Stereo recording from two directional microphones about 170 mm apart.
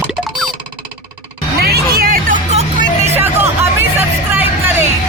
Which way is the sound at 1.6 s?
60° right (ahead or behind).